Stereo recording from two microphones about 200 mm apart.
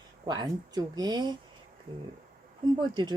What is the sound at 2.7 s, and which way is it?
Speech, 20° right (ahead or behind).